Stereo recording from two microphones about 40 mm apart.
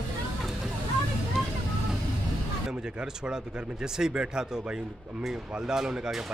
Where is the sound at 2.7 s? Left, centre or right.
Right.